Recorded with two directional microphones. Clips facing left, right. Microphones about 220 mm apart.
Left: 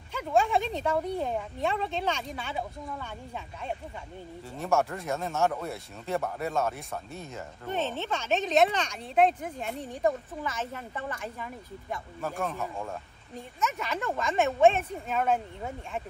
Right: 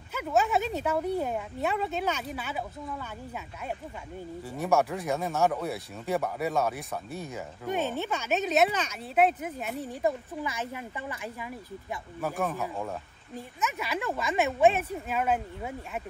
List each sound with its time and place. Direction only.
0.1 s a woman's voice: 5° right (ahead or behind)
4.8 s a woman's voice: centre (ahead or behind)